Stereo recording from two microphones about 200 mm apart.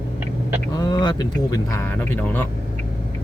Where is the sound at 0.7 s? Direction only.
20° left (ahead or behind).